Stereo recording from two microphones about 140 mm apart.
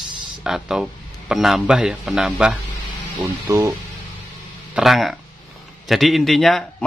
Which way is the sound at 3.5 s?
20° right (ahead or behind).